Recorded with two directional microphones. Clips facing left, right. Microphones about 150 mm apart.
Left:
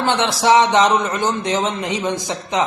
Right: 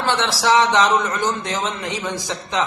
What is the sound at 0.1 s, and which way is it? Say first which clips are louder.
A man's voice: left 3 dB; 20° left (ahead or behind).